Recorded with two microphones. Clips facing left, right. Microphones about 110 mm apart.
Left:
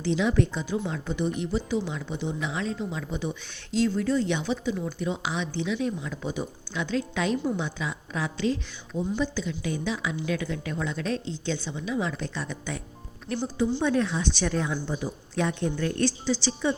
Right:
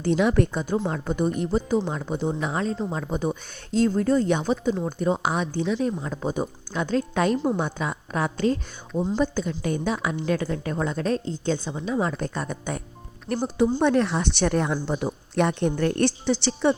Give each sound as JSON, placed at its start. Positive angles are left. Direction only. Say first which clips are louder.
{"t": 0.0, "sound": "a woman's voice", "louder": "right 4 dB", "side_deg": -55}